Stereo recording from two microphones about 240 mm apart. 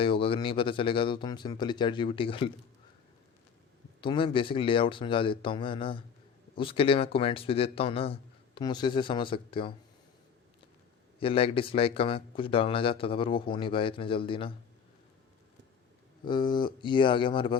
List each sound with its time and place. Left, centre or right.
0.0 s speech: left
4.0 s speech: centre
11.2 s speech: left
16.2 s speech: centre